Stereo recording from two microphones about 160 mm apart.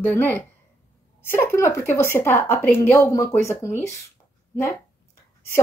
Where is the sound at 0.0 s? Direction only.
10° left (ahead or behind).